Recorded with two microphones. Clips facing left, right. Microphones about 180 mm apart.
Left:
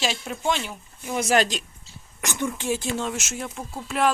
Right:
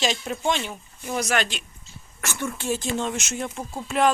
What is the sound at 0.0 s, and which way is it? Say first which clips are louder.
Speech: right 2 dB; 5° left (ahead or behind).